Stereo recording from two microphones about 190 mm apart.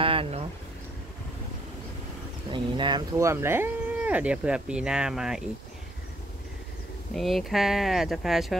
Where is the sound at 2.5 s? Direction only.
25° right (ahead or behind); by 5.4 s 5° right (ahead or behind).